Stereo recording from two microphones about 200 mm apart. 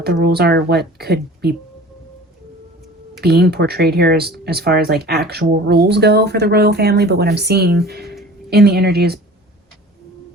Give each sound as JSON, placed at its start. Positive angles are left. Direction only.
{"t": 0.0, "sound": "speech", "side_deg": -50}
{"t": 3.2, "sound": "speech", "side_deg": -50}